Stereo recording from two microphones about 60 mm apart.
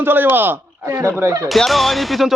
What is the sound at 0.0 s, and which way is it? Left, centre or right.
Speech, right.